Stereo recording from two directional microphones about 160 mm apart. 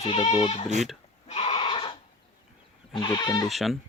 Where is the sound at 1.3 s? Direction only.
35° left (ahead or behind).